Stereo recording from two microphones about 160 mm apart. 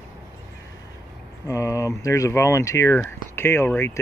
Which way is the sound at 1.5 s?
20° left (ahead or behind).